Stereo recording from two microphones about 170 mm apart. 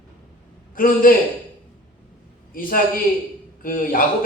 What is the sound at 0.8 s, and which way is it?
Speech, 55° left (ahead or behind).